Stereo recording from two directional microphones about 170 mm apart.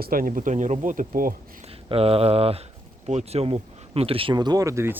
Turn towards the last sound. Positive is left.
turn(degrees=-15)  # may be behind; listen again after turning